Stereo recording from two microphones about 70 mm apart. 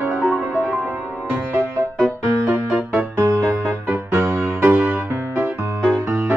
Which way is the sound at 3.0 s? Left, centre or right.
Right.